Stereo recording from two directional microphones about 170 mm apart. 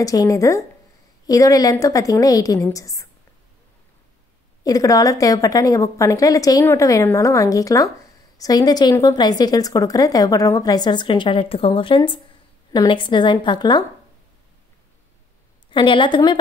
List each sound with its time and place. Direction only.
0.0 s a woman's voice: 20° left (ahead or behind)
4.6 s a woman's voice: 20° left (ahead or behind)
15.7 s a woman's voice: 30° left (ahead or behind)